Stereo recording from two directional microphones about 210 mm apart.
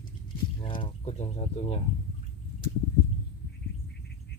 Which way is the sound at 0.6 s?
25° left (ahead or behind).